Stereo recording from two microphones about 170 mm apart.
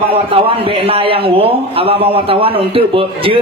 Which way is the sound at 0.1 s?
35° right (ahead or behind).